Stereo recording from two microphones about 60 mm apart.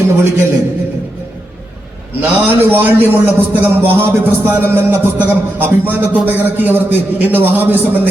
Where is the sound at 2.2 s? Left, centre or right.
Right.